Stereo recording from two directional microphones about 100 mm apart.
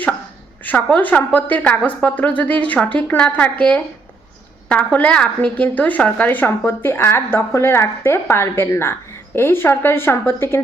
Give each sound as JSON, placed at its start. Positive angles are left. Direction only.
{"t": 0.6, "sound": "a woman's voice", "side_deg": 15}